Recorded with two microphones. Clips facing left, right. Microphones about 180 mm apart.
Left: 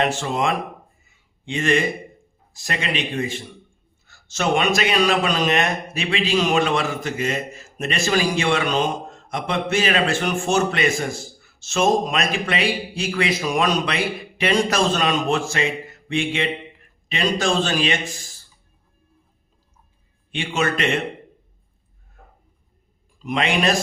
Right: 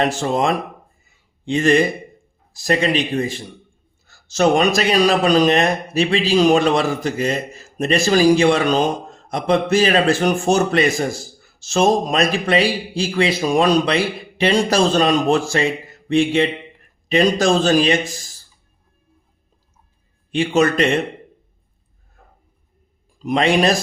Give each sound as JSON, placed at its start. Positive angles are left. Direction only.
{"t": 0.0, "sound": "a man's voice", "side_deg": -35}
{"t": 1.0, "sound": "a sound", "side_deg": -35}
{"t": 2.5, "sound": "a man's voice", "side_deg": -35}
{"t": 20.3, "sound": "a man's voice", "side_deg": -35}
{"t": 23.2, "sound": "a man's voice", "side_deg": -35}